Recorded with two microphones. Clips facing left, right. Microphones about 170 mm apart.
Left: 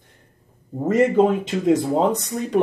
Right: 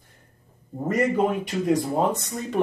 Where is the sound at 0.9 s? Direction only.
25° left (ahead or behind).